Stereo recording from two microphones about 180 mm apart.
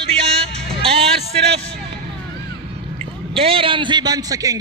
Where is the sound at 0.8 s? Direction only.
35° right (ahead or behind).